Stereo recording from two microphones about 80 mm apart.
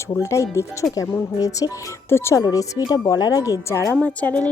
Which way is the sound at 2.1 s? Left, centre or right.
Left.